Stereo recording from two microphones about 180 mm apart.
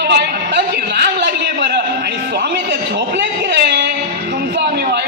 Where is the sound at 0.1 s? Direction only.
70° right (ahead or behind).